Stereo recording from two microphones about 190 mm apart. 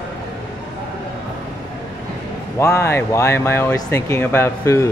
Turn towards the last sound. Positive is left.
turn(degrees=15)  # may be behind; listen again after turning